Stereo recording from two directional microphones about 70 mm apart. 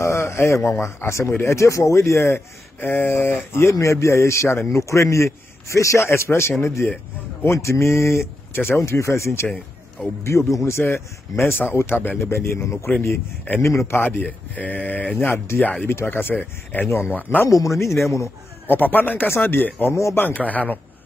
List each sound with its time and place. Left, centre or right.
0.0 s a sound: left
0.7 s speech: left
8.5 s speech: left
12.3 s speech: left
14.2 s speech: left
15.2 s speech: left
17.5 s speech: left
18.7 s speech: left